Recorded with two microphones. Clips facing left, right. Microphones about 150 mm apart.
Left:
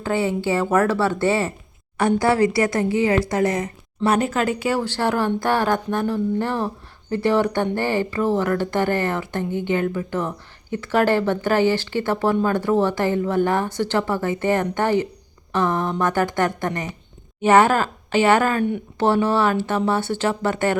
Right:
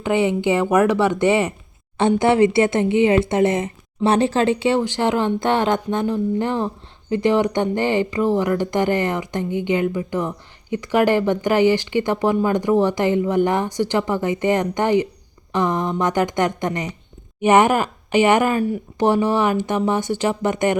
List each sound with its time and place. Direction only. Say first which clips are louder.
0.0 s a woman's voice: right 3 dB; 20° right (ahead or behind)